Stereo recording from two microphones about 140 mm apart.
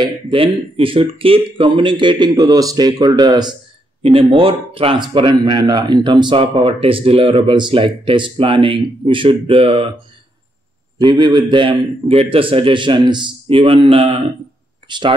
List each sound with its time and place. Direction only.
0.0 s speech: 40° right (ahead or behind)
4.0 s speech: 40° right (ahead or behind)
11.0 s speech: 30° right (ahead or behind)
14.9 s speech: 35° right (ahead or behind)